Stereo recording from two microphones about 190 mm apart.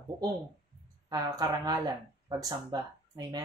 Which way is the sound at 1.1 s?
20° right (ahead or behind).